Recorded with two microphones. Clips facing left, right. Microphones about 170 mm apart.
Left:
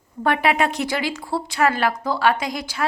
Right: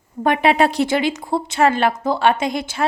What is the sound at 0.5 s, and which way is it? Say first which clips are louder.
Speech: right 5 dB; 30° right (ahead or behind).